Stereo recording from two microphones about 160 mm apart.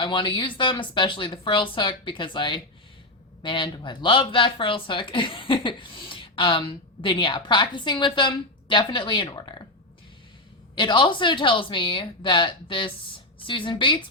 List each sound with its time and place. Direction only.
0.0 s speech: 30° left (ahead or behind)
10.8 s speech: 30° left (ahead or behind)